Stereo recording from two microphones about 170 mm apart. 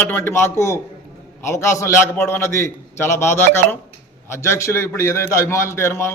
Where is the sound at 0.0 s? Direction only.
15° left (ahead or behind).